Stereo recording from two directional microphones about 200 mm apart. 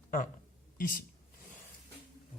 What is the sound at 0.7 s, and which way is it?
Speech, 45° left (ahead or behind).